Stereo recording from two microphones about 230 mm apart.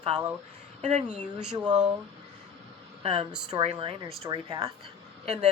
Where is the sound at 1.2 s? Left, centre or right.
Centre.